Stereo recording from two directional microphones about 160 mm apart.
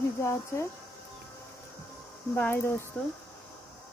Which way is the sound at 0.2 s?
20° left (ahead or behind).